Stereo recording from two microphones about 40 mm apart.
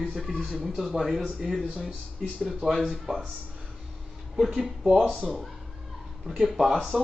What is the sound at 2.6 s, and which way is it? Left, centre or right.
Speech, right.